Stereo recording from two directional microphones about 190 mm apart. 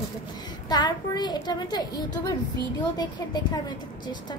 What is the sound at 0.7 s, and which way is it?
A child's voice, 20° left (ahead or behind).